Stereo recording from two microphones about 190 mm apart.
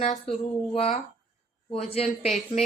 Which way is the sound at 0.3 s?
30° left (ahead or behind).